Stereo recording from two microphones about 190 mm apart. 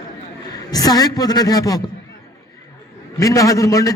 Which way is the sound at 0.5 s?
20° left (ahead or behind).